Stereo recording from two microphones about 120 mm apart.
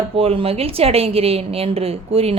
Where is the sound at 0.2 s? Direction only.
55° right (ahead or behind).